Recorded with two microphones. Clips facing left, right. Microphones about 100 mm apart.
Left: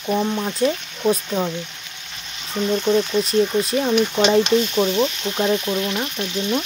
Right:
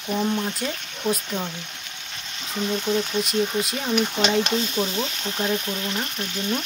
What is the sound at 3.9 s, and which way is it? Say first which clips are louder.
Speech: left 4 dB; 25° left (ahead or behind).